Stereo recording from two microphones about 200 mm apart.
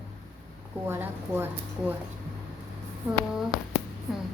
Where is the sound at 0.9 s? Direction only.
10° right (ahead or behind).